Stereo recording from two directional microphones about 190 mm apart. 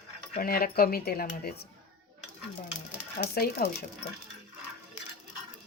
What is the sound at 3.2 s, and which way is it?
Speech, 55° left (ahead or behind).